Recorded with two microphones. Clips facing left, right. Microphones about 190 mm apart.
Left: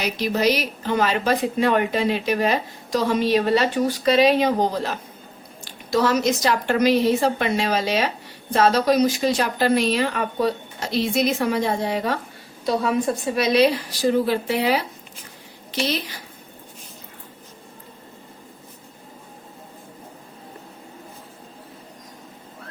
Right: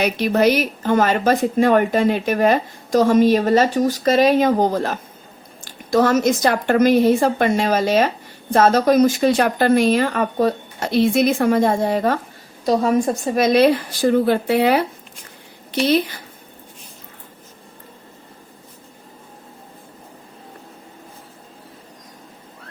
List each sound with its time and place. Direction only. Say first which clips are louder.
0.0 s a woman's voice: right 5 dB; 55° right (ahead or behind)